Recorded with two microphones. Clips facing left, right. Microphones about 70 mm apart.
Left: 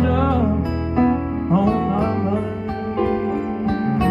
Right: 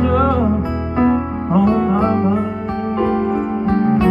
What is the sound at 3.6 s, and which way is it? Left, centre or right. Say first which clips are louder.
Music: right 6 dB; right.